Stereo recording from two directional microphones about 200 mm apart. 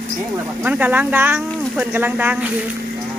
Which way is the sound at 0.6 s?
10° right (ahead or behind).